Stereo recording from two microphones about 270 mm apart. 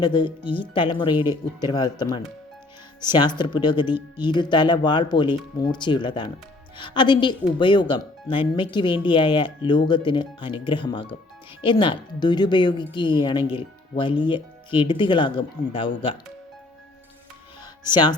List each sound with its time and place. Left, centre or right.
0.0 s speech: centre
13.4 s speech: centre
13.9 s speech: centre
17.9 s speech: centre